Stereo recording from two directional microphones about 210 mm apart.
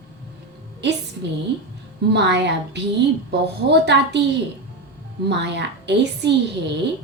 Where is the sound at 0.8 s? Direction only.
55° right (ahead or behind).